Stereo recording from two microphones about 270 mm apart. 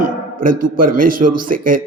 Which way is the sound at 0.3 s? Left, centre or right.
Right.